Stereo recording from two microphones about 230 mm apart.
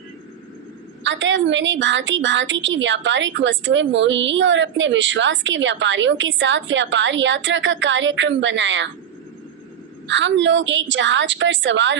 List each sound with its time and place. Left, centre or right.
1.0 s a woman's voice: right
10.1 s a woman's voice: right